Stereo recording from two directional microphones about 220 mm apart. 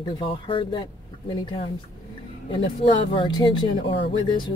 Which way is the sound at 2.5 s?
25° left (ahead or behind).